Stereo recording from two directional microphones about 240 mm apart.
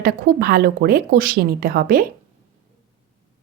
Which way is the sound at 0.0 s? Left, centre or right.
Right.